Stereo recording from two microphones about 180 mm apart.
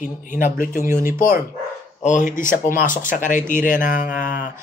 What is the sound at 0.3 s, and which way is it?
Speech, 45° left (ahead or behind).